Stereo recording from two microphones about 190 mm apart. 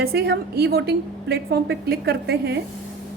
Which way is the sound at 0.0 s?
55° right (ahead or behind).